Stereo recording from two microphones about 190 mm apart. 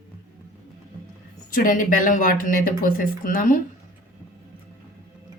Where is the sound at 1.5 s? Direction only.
45° left (ahead or behind).